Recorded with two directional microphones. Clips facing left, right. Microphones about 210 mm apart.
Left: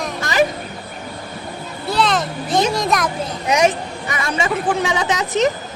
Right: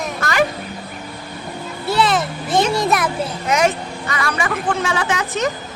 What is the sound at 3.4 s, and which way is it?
Speech, 20° left (ahead or behind).